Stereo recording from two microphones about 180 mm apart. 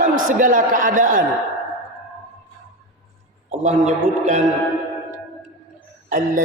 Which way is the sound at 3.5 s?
40° right (ahead or behind).